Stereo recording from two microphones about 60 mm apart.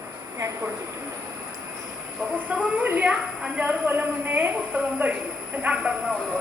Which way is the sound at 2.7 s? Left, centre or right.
Right.